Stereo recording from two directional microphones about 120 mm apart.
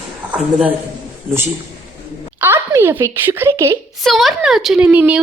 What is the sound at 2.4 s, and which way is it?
Speech, 20° right (ahead or behind).